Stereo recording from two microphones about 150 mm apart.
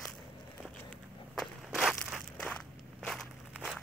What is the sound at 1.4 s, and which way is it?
Walk, centre (ahead or behind).